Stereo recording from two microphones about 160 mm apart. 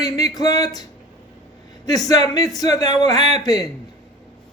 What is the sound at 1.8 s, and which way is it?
Speech, 25° left (ahead or behind).